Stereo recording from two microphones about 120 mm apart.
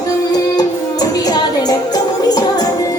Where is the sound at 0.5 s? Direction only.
35° left (ahead or behind).